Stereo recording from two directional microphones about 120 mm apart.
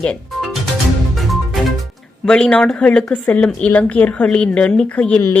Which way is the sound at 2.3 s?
5° left (ahead or behind).